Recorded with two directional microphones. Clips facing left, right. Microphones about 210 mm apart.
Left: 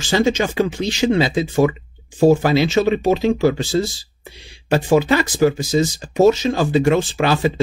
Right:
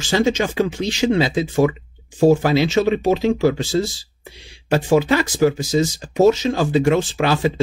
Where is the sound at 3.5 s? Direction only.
35° left (ahead or behind).